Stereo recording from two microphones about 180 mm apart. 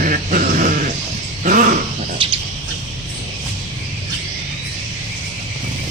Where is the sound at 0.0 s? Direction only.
50° right (ahead or behind).